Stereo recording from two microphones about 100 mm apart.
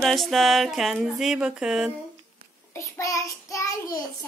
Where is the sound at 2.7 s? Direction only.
30° left (ahead or behind).